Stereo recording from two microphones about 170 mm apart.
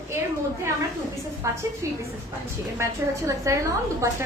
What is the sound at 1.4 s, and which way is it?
A woman's voice, 20° right (ahead or behind).